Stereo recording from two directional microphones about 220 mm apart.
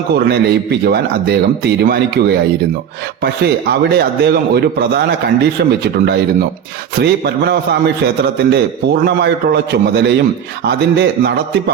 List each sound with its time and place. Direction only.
0.1 s a man's voice: 50° right (ahead or behind)
7.0 s a man's voice: 45° right (ahead or behind)